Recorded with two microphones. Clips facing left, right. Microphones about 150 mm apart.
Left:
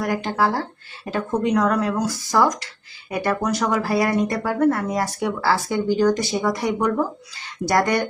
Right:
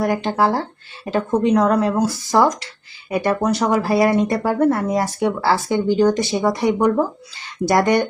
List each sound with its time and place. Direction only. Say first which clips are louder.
0.0 s speech: right 3 dB; 25° right (ahead or behind)